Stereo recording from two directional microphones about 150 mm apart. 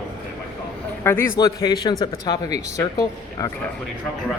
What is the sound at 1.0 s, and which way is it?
Speech, 15° left (ahead or behind).